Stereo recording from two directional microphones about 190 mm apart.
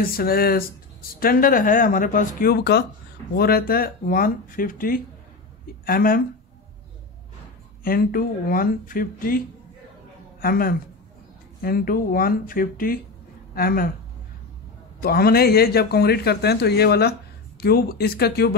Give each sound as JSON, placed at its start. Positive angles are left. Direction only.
{"t": 0.0, "sound": "speech", "side_deg": 50}
{"t": 7.8, "sound": "speech", "side_deg": 50}
{"t": 10.4, "sound": "speech", "side_deg": 50}
{"t": 15.0, "sound": "a man's voice", "side_deg": 55}